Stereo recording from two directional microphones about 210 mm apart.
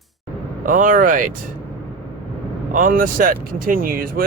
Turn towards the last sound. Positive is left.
turn(degrees=-45)  # may be behind; listen again after turning